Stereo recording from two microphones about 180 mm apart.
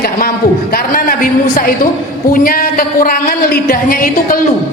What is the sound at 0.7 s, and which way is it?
A man's voice, 55° left (ahead or behind).